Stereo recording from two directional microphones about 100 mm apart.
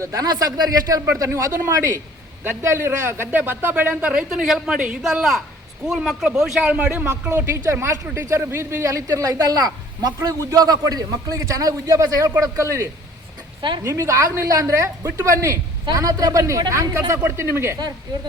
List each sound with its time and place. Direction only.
0.0 s speech: 35° right (ahead or behind)
1.0 s a man's voice: 25° right (ahead or behind)
4.1 s a woman's voice: 10° right (ahead or behind)
7.1 s a man's voice: 25° right (ahead or behind)
13.6 s a woman's voice: 50° right (ahead or behind)
13.8 s a man's voice: 30° right (ahead or behind)